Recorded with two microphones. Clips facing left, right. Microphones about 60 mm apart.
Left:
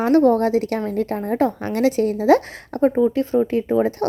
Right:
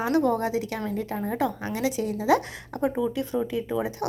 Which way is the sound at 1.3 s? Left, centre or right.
Left.